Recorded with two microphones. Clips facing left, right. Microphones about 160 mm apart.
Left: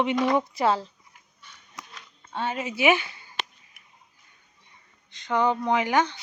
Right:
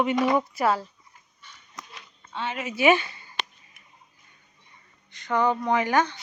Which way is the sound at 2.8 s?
10° left (ahead or behind).